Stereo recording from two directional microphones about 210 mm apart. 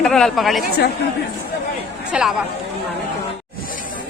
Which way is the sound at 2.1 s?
5° right (ahead or behind).